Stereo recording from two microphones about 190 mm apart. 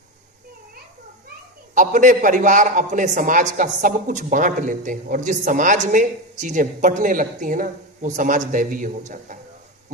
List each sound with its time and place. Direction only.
1.7 s a man's voice: 40° right (ahead or behind)